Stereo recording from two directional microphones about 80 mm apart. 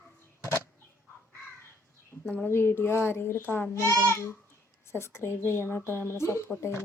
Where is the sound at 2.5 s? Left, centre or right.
Left.